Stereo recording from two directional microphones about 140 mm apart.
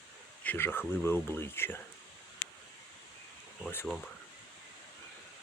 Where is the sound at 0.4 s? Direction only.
15° left (ahead or behind).